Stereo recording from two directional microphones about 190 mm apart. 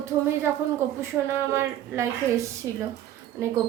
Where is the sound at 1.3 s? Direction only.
15° right (ahead or behind).